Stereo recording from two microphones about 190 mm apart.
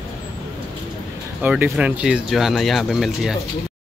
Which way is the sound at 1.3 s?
10° right (ahead or behind).